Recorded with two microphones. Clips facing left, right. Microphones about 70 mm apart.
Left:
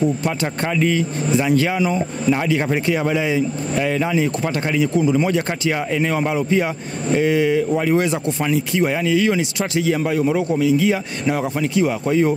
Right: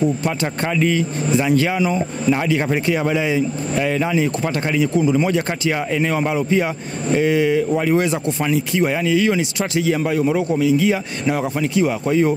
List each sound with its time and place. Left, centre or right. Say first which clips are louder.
0.2 s speech: even; centre